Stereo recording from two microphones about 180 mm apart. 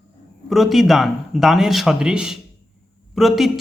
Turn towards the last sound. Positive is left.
turn(degrees=0)  # may be behind; listen again after turning